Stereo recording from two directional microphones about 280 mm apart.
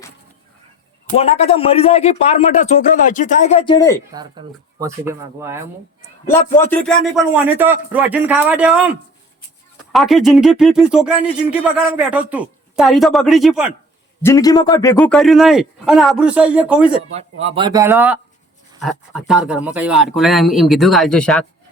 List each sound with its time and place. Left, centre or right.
1.1 s a man's voice: left
4.1 s speech: centre
6.2 s speech: centre
9.9 s speech: centre
14.2 s speech: centre
17.4 s speech: centre